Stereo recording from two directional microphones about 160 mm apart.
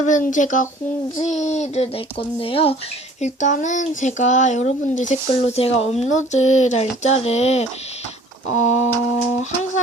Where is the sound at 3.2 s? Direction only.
50° left (ahead or behind).